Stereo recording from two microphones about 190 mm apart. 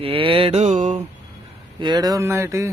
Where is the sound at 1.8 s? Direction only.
20° right (ahead or behind).